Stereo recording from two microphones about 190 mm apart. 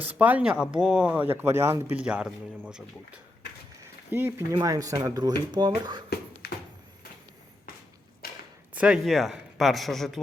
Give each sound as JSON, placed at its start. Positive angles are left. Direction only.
{"t": 0.0, "sound": "speech", "side_deg": -10}
{"t": 4.1, "sound": "speech", "side_deg": -10}
{"t": 8.2, "sound": "a sound", "side_deg": 50}
{"t": 8.7, "sound": "speech", "side_deg": -5}